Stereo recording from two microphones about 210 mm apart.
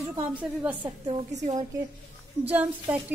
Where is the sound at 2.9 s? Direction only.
5° right (ahead or behind).